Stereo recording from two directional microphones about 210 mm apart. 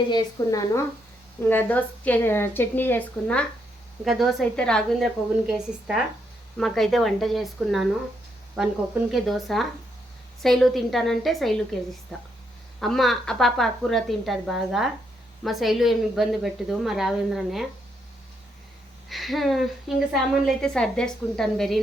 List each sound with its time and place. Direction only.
0.1 s a woman's voice: 20° left (ahead or behind); by 17.7 s centre (ahead or behind)
19.0 s a woman's voice: centre (ahead or behind)